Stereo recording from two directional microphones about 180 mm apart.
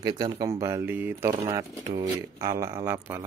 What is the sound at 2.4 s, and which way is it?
Speech, 15° right (ahead or behind).